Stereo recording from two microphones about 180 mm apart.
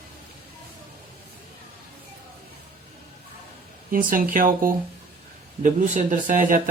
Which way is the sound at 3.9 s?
50° right (ahead or behind).